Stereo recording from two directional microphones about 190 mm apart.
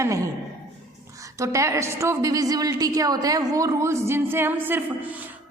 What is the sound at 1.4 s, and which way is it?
Speech, 15° right (ahead or behind).